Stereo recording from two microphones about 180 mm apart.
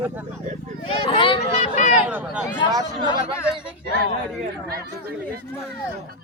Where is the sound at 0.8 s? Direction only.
30° left (ahead or behind).